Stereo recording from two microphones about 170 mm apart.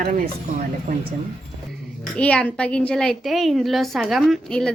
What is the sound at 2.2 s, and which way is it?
A woman's voice, 5° left (ahead or behind).